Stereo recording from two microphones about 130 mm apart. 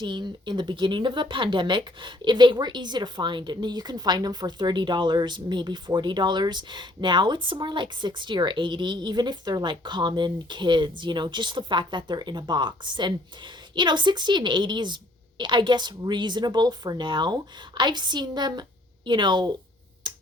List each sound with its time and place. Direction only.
0.0 s speech: 35° right (ahead or behind)
20.1 s tick-tock: 35° right (ahead or behind)